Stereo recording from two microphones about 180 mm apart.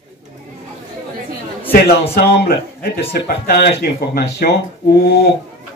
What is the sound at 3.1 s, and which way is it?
Speech, 60° left (ahead or behind).